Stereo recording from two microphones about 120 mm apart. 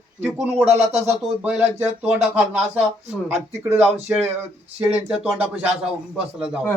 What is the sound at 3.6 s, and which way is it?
Speech, 15° right (ahead or behind).